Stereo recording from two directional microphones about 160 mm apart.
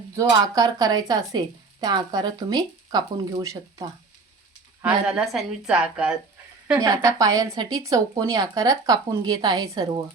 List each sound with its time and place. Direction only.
0.2 s speech: 25° right (ahead or behind)
4.8 s a woman's voice: 5° right (ahead or behind)
6.7 s speech: 20° right (ahead or behind)